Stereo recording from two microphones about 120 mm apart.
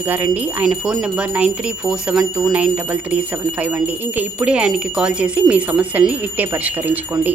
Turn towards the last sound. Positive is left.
turn(degrees=-15)  # may be behind; listen again after turning